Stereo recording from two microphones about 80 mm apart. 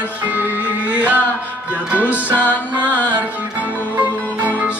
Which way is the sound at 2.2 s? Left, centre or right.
Centre.